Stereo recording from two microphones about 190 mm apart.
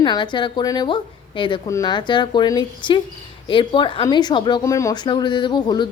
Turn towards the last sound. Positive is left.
turn(degrees=25)  # may be behind; listen again after turning